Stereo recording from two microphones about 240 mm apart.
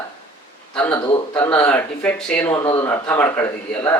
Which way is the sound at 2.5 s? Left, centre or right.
Left.